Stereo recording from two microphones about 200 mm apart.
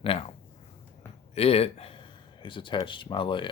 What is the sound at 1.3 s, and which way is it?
Speech, 30° left (ahead or behind).